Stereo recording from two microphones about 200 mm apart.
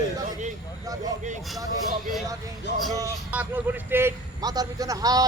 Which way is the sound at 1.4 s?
Centre (ahead or behind).